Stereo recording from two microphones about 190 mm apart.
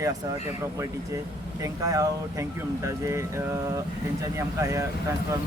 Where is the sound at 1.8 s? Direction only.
20° right (ahead or behind).